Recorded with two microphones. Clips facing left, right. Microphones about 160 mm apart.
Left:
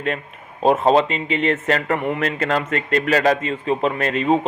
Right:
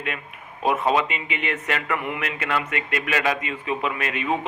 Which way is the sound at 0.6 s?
30° left (ahead or behind).